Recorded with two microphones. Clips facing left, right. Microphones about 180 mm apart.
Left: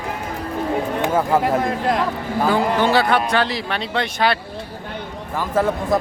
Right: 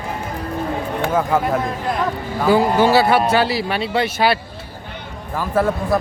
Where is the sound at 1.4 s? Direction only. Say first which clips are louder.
Left 2 dB; 90° left.